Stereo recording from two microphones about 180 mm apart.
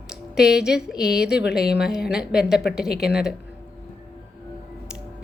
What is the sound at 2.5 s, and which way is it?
Speech, 60° left (ahead or behind).